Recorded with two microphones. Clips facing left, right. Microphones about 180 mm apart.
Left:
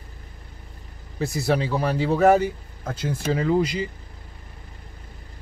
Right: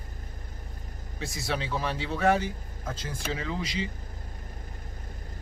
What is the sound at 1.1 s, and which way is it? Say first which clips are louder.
Speech: left 10 dB; 60° left (ahead or behind).